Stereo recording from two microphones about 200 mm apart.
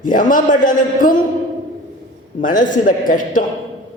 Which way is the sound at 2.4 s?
40° left (ahead or behind).